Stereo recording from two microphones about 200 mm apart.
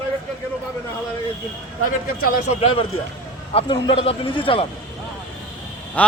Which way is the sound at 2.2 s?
30° left (ahead or behind).